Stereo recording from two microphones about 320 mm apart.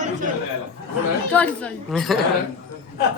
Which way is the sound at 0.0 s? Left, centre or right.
Right.